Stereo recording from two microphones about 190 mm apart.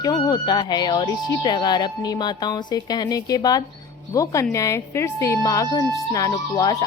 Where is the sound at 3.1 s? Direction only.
20° left (ahead or behind).